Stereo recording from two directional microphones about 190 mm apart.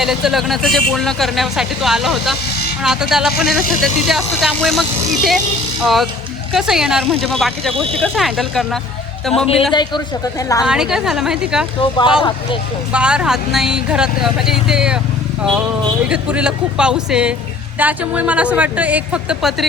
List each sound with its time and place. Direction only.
0.0 s speech: centre (ahead or behind)
10.6 s speech: 5° right (ahead or behind)
11.8 s speech: 25° left (ahead or behind)
12.9 s speech: 5° right (ahead or behind)
16.0 s speech: 5° right (ahead or behind)